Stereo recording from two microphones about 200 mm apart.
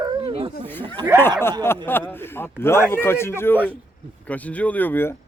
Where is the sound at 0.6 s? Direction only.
10° left (ahead or behind).